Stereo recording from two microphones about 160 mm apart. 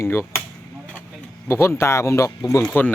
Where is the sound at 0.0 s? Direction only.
15° left (ahead or behind).